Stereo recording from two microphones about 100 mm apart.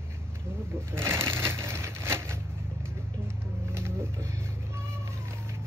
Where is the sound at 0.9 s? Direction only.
25° right (ahead or behind).